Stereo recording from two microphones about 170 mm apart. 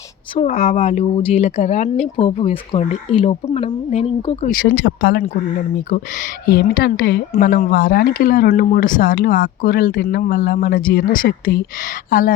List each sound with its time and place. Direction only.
0.4 s speech: 45° left (ahead or behind)
4.4 s a woman's voice: 70° left (ahead or behind)